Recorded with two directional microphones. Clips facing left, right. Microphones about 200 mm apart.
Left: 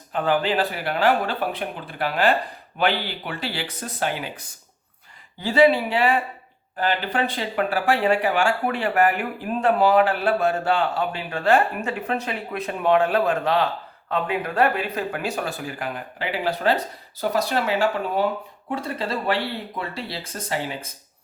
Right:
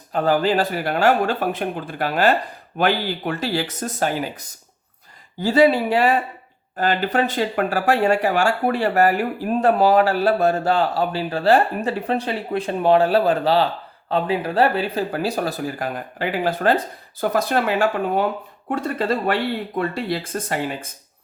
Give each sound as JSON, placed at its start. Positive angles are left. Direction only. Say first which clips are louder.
{"t": 0.1, "sound": "speech", "louder": "right 3 dB", "side_deg": -40}
{"t": 18.9, "sound": "speech", "louder": "right 4 dB", "side_deg": -50}